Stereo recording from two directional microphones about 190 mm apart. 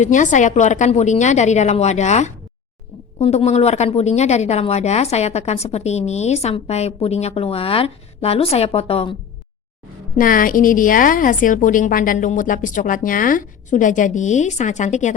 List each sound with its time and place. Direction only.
0.0 s a woman's voice: 40° left (ahead or behind)
10.2 s a woman's voice: 45° left (ahead or behind)